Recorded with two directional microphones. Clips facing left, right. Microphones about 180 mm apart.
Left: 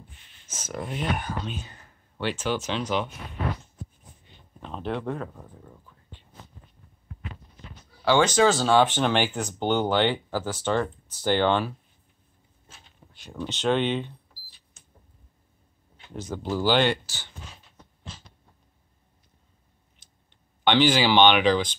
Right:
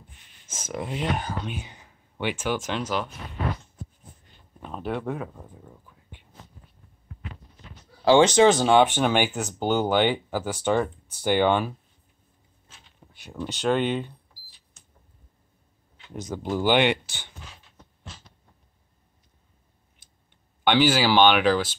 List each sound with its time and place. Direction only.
0.5 s speech: 10° right (ahead or behind)
0.8 s speech: 25° right (ahead or behind)
1.4 s speech: 15° right (ahead or behind)
4.6 s speech: 5° right (ahead or behind)
8.0 s speech: 25° right (ahead or behind)
13.1 s speech: 5° right (ahead or behind)
14.8 s a sound: centre (ahead or behind)
16.2 s speech: 15° right (ahead or behind)
20.6 s speech: 10° right (ahead or behind)